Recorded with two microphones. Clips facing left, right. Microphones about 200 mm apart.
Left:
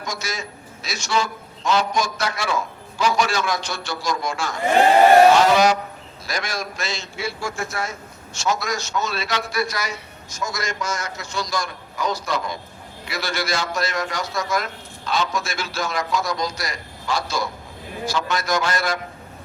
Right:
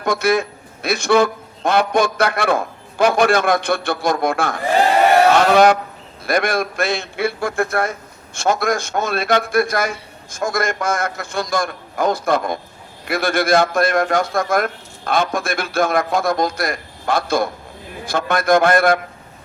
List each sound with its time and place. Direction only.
0.0 s a man's voice: 60° right (ahead or behind)